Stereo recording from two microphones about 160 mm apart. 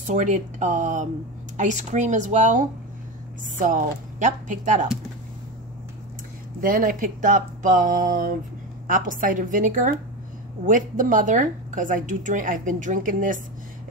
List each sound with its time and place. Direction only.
0.0 s a woman's voice: 50° right (ahead or behind)
6.6 s a woman's voice: 55° right (ahead or behind)